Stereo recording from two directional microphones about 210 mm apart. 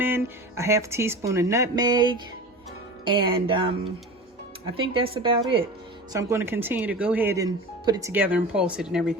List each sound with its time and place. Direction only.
0.0 s speech: 10° right (ahead or behind)
5.1 s speech: 25° right (ahead or behind)
6.1 s speech: 10° right (ahead or behind)